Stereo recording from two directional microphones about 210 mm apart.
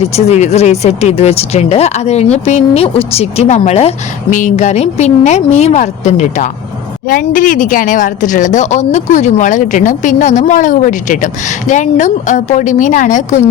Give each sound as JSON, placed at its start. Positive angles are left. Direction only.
{"t": 0.0, "sound": "speech", "side_deg": 30}